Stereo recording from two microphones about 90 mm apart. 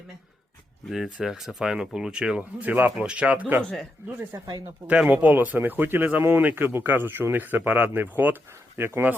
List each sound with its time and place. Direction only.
0.9 s speech: 5° right (ahead or behind)
4.9 s speech: 15° right (ahead or behind)